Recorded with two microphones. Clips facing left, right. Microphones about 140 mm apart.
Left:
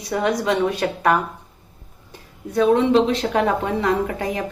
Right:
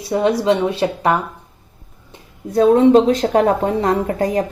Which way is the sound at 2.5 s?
35° right (ahead or behind).